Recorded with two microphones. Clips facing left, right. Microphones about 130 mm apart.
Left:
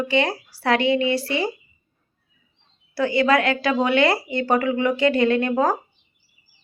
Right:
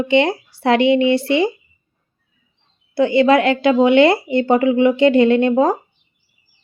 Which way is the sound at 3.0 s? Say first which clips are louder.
Right 6 dB; 25° right (ahead or behind).